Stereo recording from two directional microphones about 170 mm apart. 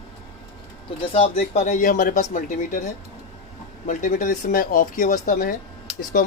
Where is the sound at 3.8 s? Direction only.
50° left (ahead or behind).